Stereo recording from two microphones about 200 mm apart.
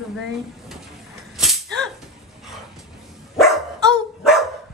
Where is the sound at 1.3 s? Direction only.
Centre (ahead or behind).